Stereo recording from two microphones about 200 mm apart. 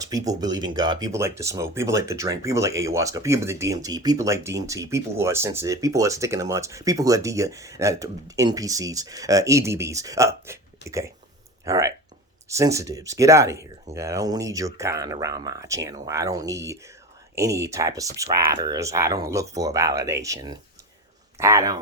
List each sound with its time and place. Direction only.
0.0 s speech: 15° right (ahead or behind)